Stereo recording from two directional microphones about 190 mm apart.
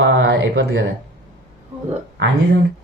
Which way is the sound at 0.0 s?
70° right (ahead or behind).